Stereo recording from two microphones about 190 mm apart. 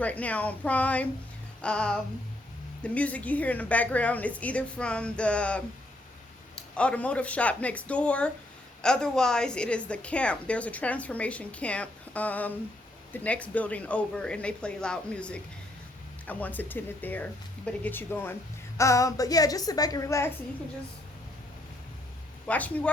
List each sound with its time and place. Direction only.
0.0 s a woman's voice: 10° left (ahead or behind)
1.6 s a sound: 5° left (ahead or behind)
2.8 s a woman's voice: 5° left (ahead or behind)
22.4 s a woman's voice: 10° left (ahead or behind)